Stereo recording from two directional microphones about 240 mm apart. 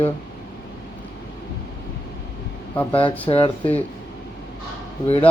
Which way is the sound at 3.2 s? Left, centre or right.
Left.